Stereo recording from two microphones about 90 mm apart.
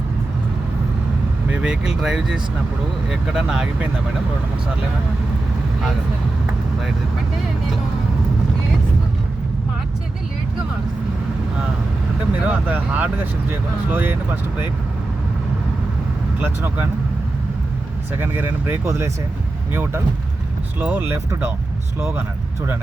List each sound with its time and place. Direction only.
1.5 s speech: 10° right (ahead or behind)
12.5 s speech: 15° right (ahead or behind)
16.4 s speech: 20° right (ahead or behind)
18.2 s speech: 25° right (ahead or behind)
21.1 s speech: 30° right (ahead or behind)